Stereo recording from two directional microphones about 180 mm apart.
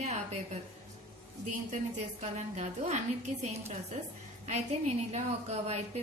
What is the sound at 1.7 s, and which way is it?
A woman's voice, 40° right (ahead or behind).